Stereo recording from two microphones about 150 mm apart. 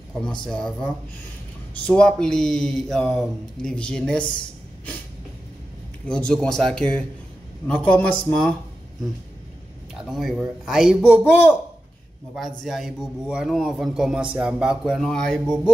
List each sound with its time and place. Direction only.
0.5 s a man's voice: 5° left (ahead or behind)
1.9 s a man's voice: 5° left (ahead or behind)
6.0 s a man's voice: 5° left (ahead or behind)
10.0 s a man's voice: centre (ahead or behind)